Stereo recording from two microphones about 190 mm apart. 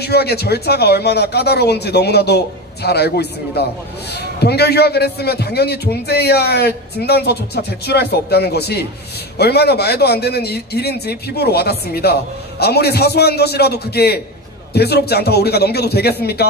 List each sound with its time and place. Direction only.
0.0 s a man's voice: 60° left (ahead or behind)